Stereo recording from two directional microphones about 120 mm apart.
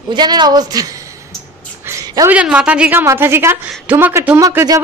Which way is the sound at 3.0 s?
20° right (ahead or behind).